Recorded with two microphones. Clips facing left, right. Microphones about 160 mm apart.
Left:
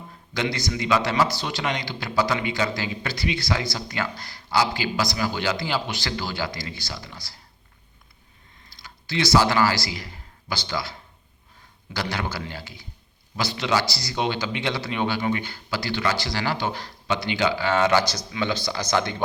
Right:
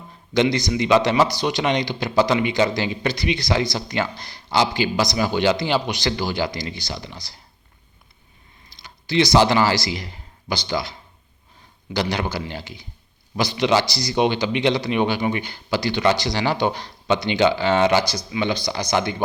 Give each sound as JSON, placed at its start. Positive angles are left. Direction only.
{"t": 0.3, "sound": "a man's voice", "side_deg": -20}
{"t": 8.7, "sound": "speech", "side_deg": -20}
{"t": 11.9, "sound": "a man's voice", "side_deg": -20}